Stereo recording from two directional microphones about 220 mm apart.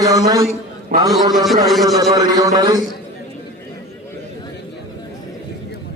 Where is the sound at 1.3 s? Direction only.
Centre (ahead or behind).